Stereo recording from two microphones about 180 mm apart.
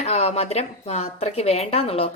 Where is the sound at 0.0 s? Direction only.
35° left (ahead or behind).